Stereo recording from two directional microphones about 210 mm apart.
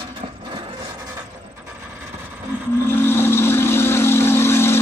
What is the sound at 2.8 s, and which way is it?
Vehicle, 10° left (ahead or behind).